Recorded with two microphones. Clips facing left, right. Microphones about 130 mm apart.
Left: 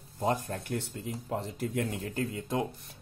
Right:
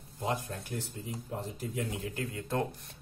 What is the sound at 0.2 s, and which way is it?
Speech, 45° left (ahead or behind).